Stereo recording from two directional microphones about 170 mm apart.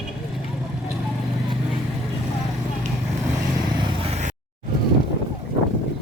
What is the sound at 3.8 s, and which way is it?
Vehicle, 40° right (ahead or behind).